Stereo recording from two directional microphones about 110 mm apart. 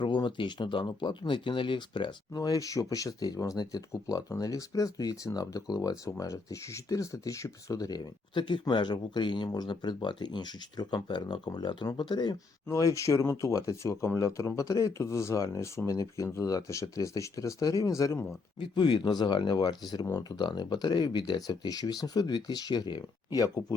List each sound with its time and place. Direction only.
0.0 s speech: 45° left (ahead or behind)
2.3 s speech: 35° left (ahead or behind)
12.6 s speech: 30° left (ahead or behind)
18.6 s speech: 45° left (ahead or behind)